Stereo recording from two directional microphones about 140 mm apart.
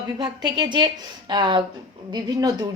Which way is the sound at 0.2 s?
30° right (ahead or behind).